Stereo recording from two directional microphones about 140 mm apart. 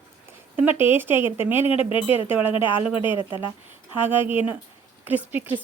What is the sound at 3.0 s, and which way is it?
Speech, 40° left (ahead or behind).